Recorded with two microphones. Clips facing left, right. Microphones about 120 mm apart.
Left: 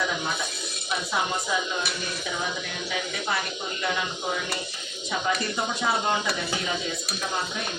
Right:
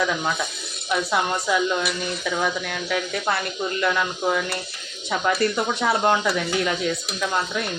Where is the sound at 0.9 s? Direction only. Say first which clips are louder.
Right 5 dB; 65° right (ahead or behind).